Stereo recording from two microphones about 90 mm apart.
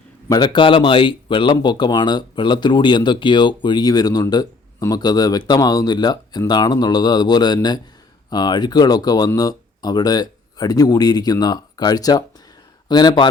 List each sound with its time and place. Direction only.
0.3 s speech: 55° left (ahead or behind)